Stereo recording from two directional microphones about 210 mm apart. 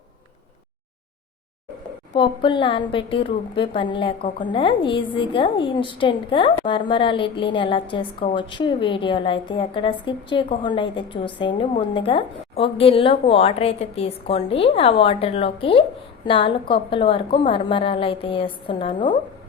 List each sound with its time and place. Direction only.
2.1 s a woman's voice: 25° left (ahead or behind)